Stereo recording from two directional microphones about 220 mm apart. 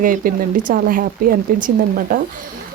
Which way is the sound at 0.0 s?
35° right (ahead or behind).